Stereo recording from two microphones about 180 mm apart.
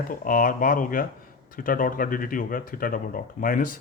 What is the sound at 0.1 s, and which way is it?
Speech, 50° left (ahead or behind).